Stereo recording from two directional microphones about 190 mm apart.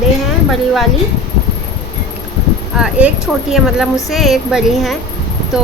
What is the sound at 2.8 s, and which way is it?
Speech, 5° right (ahead or behind).